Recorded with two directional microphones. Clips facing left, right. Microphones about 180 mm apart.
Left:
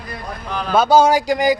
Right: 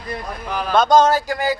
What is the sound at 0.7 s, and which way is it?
Speech, 10° left (ahead or behind).